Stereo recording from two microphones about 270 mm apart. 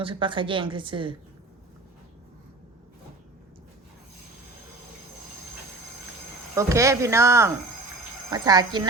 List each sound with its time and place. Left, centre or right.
0.0 s a woman's voice: centre
6.6 s speech: centre